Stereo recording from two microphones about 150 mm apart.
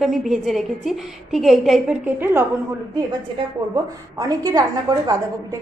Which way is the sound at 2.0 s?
15° right (ahead or behind).